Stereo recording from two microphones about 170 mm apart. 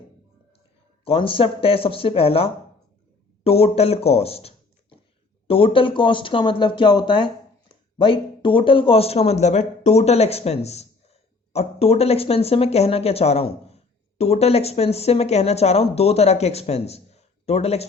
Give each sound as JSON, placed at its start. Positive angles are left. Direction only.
{"t": 1.0, "sound": "speech", "side_deg": 30}